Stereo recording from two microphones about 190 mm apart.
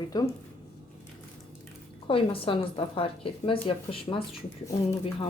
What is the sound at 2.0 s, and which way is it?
Speech, 30° left (ahead or behind).